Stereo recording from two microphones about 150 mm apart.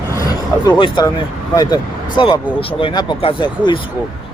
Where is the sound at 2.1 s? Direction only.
35° left (ahead or behind).